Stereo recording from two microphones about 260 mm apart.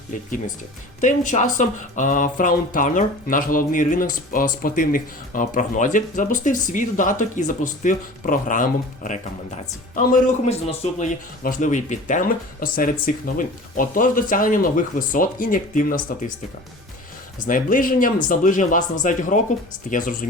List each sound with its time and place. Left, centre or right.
1.0 s speech: left
17.4 s speech: left